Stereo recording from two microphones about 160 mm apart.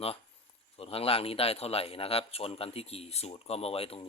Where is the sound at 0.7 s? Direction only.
35° left (ahead or behind).